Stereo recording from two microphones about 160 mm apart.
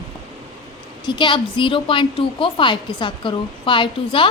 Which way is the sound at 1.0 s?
30° left (ahead or behind).